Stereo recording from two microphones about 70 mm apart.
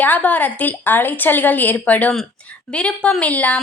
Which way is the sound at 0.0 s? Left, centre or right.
Left.